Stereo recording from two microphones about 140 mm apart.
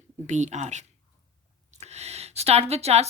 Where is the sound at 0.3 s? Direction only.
55° right (ahead or behind).